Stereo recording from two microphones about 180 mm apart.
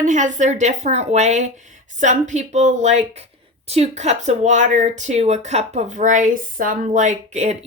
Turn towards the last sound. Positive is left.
turn(degrees=-40)  # may be behind; listen again after turning